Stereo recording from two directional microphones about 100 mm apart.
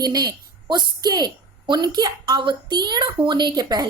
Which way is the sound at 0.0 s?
40° right (ahead or behind).